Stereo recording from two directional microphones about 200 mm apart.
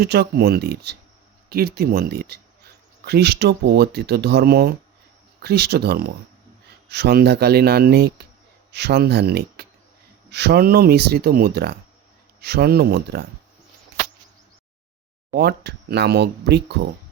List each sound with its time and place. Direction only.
0.0 s speech: 55° right (ahead or behind)
15.3 s speech: 55° right (ahead or behind)